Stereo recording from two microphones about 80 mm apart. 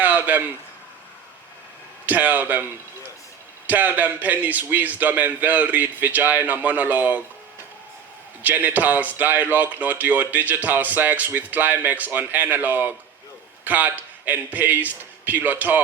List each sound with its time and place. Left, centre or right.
0.0 s a sound: right
2.0 s speech: right
3.7 s speech: right
8.4 s speech: right